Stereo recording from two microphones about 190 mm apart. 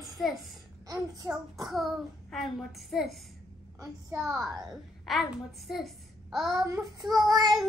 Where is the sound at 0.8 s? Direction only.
20° right (ahead or behind).